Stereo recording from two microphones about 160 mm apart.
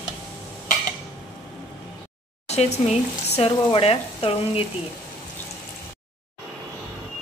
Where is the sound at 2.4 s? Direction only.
45° left (ahead or behind).